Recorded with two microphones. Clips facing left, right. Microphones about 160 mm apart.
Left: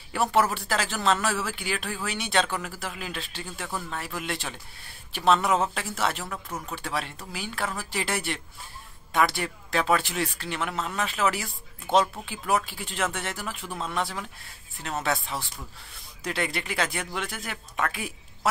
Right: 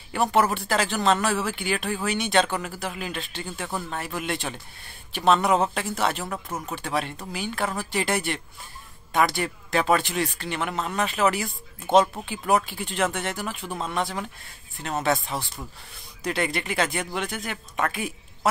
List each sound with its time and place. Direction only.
0.1 s speech: centre (ahead or behind)
6.2 s speech: 15° right (ahead or behind)
6.7 s speech: centre (ahead or behind)
16.3 s speech: centre (ahead or behind)